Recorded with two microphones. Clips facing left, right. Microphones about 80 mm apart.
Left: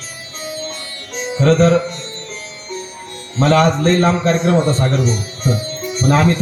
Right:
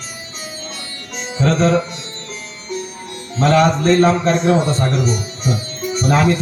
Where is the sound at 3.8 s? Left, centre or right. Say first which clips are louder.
Right 1 dB; left.